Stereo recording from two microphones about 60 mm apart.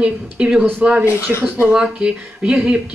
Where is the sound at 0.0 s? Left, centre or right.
Centre.